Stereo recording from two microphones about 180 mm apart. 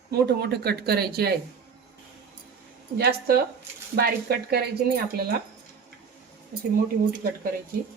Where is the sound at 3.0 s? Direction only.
60° right (ahead or behind).